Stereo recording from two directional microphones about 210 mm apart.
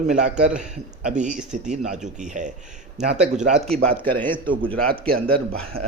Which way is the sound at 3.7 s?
5° left (ahead or behind).